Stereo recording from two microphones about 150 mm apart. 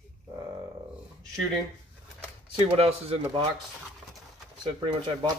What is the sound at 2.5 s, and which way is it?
Speech, 40° right (ahead or behind).